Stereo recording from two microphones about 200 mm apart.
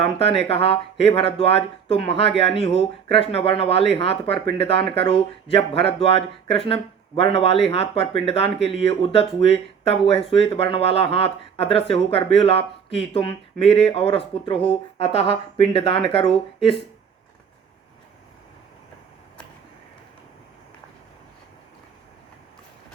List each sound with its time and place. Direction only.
0.0 s speech: 30° left (ahead or behind)